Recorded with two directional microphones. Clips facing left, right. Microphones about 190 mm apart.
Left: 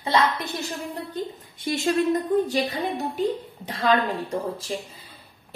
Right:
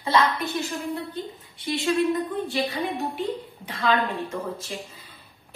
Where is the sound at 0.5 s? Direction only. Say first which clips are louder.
Right 2 dB; 40° left (ahead or behind).